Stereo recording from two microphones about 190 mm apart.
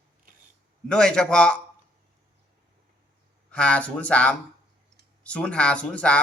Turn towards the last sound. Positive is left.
turn(degrees=5)  # may be behind; listen again after turning